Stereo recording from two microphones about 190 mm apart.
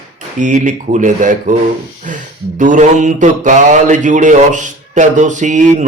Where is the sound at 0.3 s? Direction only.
40° right (ahead or behind).